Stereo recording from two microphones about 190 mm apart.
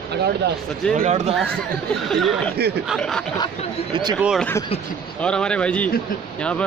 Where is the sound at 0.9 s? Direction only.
35° right (ahead or behind).